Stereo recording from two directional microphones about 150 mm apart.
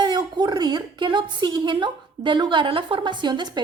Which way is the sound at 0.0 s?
30° right (ahead or behind).